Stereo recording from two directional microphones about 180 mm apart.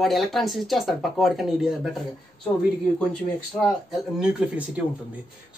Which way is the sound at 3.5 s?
Centre (ahead or behind).